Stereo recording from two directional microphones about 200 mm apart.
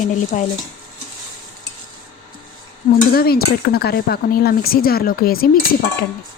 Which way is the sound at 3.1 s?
50° left (ahead or behind).